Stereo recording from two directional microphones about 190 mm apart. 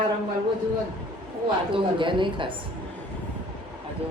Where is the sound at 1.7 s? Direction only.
25° right (ahead or behind).